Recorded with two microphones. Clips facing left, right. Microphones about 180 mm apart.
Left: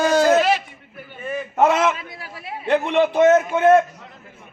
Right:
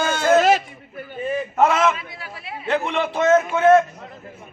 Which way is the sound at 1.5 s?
15° left (ahead or behind).